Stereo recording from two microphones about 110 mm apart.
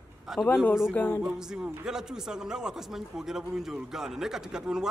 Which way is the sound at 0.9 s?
20° left (ahead or behind).